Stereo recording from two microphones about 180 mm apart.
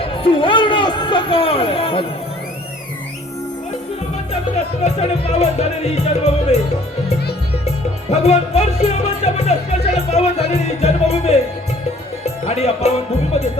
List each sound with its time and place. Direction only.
0.0 s a sound: 30° left (ahead or behind)
4.8 s speech: 40° left (ahead or behind)
8.1 s speech: 35° left (ahead or behind)
12.2 s music: 35° left (ahead or behind)